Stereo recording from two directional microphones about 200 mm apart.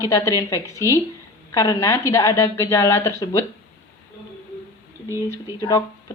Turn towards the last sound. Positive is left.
turn(degrees=20)  # may be behind; listen again after turning